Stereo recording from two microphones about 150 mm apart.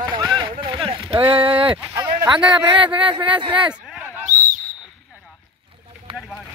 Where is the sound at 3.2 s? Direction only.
35° right (ahead or behind).